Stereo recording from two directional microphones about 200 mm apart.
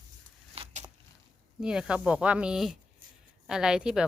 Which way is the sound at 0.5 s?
35° right (ahead or behind).